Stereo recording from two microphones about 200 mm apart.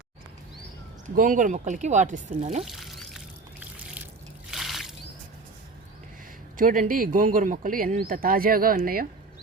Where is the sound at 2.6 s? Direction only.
Centre (ahead or behind).